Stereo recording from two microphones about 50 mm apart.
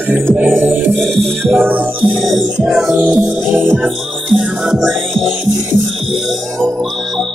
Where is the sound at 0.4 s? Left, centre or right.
Right.